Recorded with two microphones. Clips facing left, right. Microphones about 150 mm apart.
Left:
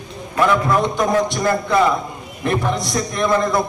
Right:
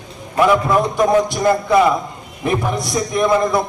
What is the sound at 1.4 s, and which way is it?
Speech, 15° right (ahead or behind).